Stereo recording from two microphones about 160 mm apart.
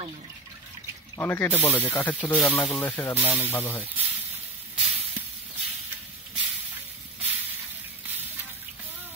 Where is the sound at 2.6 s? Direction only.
5° left (ahead or behind).